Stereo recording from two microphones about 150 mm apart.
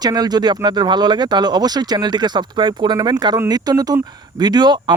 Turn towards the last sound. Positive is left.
turn(degrees=-30)  # may be behind; listen again after turning